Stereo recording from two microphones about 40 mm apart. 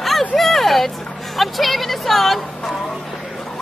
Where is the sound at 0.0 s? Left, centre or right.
Centre.